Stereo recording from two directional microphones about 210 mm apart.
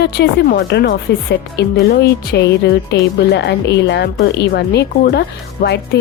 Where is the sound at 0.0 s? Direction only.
50° left (ahead or behind).